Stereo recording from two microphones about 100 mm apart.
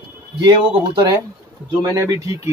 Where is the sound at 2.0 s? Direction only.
35° right (ahead or behind).